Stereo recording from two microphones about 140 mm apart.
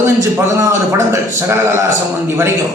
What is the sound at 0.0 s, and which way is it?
A man's voice, 20° right (ahead or behind).